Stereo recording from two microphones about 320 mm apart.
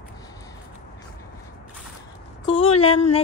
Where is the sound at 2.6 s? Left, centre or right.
Centre.